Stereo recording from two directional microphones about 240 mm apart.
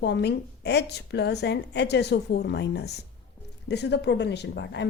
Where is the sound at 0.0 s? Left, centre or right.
Left.